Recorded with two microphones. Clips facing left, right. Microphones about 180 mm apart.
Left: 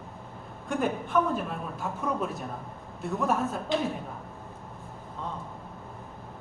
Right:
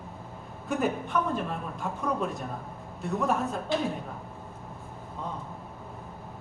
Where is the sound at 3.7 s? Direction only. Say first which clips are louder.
Left 1 dB; 20° left (ahead or behind).